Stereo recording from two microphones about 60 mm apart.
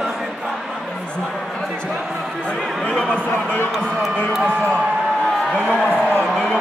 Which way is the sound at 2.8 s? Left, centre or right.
Centre.